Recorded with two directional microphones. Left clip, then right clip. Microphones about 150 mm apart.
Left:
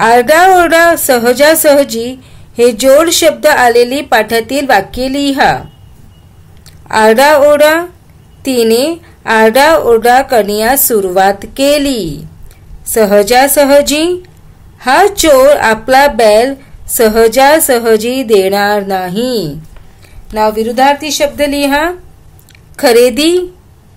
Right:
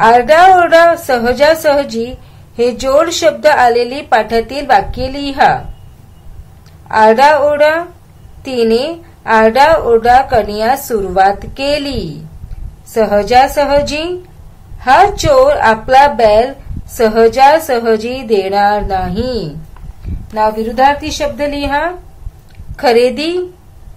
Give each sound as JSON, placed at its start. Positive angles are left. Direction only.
{"t": 0.0, "sound": "a woman's voice", "side_deg": 50}
{"t": 6.9, "sound": "a woman's voice", "side_deg": 50}